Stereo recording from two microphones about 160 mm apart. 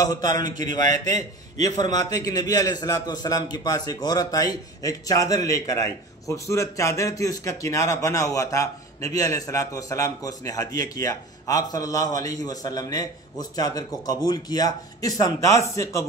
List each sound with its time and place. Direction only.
0.0 s a man's voice: 25° left (ahead or behind)